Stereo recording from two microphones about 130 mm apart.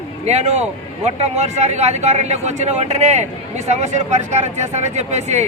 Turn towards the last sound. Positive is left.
turn(degrees=-60)  # may be behind; listen again after turning